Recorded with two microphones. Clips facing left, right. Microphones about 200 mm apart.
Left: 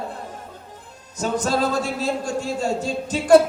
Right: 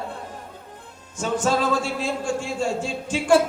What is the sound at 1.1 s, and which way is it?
A man's voice, 40° left (ahead or behind).